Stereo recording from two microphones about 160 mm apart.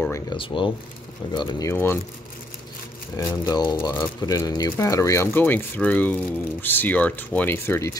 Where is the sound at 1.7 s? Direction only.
15° left (ahead or behind).